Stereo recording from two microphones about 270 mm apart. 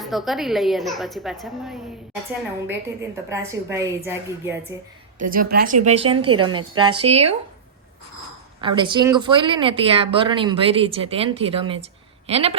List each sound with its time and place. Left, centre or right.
0.0 s a woman's voice: centre
3.2 s a woman's voice: centre
5.3 s speech: right
6.1 s a woman's voice: right
6.4 s a woman's voice: centre
8.6 s speech: centre